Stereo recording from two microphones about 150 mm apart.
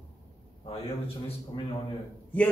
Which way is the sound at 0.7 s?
40° left (ahead or behind).